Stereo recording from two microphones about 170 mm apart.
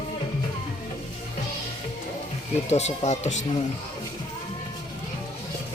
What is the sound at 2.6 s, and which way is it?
Speech, 40° left (ahead or behind).